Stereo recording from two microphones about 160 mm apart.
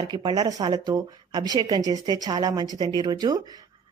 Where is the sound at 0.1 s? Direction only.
25° right (ahead or behind).